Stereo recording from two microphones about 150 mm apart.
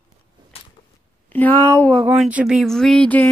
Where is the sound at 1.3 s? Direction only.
10° left (ahead or behind).